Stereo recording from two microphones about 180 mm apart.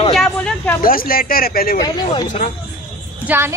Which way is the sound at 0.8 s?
55° left (ahead or behind).